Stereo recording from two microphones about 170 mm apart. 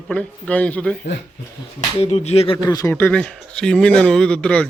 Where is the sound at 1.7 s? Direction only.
40° left (ahead or behind).